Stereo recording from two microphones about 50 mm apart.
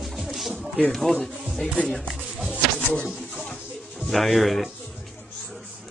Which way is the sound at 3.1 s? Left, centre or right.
Centre.